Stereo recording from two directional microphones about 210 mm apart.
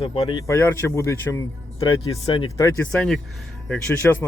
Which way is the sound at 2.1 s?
25° left (ahead or behind).